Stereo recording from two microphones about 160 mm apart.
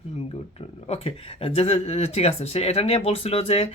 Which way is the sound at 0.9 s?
35° left (ahead or behind).